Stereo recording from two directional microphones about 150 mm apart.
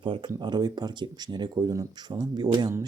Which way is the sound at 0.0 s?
30° right (ahead or behind).